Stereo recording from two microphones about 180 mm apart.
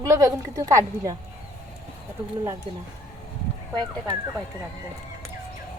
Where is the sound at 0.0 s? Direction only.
15° right (ahead or behind).